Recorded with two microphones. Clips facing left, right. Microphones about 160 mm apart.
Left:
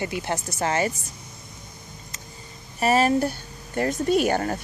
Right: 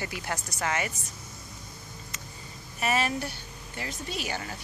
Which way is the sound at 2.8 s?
40° left (ahead or behind).